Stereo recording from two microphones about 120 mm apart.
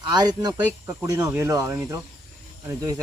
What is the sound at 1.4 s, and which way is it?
Speech, 25° right (ahead or behind).